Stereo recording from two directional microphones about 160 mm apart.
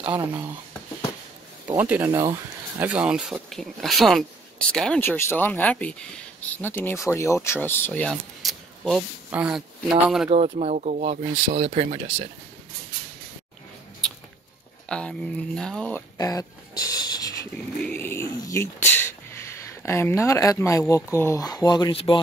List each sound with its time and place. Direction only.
1.7 s speech: 10° right (ahead or behind)
10.3 s speech: 45° right (ahead or behind)
14.0 s a sound: 5° left (ahead or behind)
14.9 s speech: 5° left (ahead or behind)
16.2 s a sound: 20° left (ahead or behind)
17.8 s speech: 15° left (ahead or behind); by 22.2 s 30° left (ahead or behind)